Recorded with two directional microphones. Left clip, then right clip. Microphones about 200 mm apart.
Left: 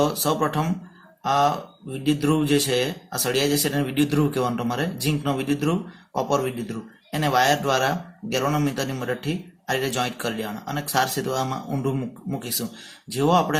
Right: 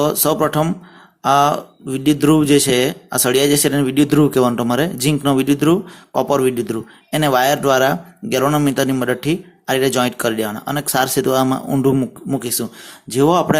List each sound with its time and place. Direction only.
0.0 s speech: 45° right (ahead or behind)